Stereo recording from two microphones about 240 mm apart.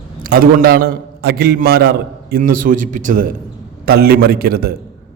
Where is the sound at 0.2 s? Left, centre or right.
Right.